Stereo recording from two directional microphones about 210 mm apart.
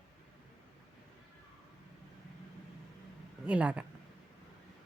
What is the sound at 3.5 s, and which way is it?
Speech, 5° right (ahead or behind).